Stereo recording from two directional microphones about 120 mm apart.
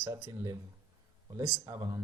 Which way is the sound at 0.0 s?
25° right (ahead or behind).